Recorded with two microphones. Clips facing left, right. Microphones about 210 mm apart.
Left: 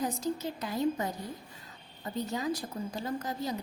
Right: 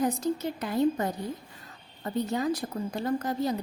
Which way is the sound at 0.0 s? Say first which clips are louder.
Right 5 dB; 60° right (ahead or behind).